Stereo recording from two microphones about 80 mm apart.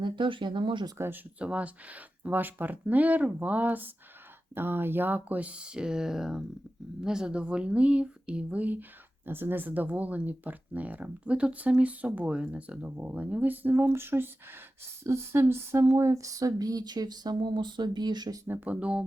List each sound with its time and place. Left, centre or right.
0.0 s speech: right
0.9 s speech: right
1.4 s speech: centre; by 18.3 s right
18.4 s speech: right